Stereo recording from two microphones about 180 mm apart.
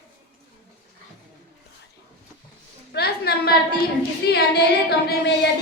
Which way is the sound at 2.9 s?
60° left (ahead or behind).